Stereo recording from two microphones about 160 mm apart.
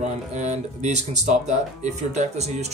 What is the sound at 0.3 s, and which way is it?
Speech, 45° right (ahead or behind).